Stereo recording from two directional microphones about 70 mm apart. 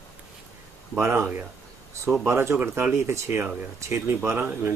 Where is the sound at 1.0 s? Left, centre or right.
Right.